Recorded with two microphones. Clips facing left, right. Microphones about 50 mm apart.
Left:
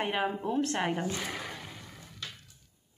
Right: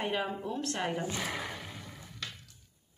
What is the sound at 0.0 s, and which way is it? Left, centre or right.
A woman's voice, left.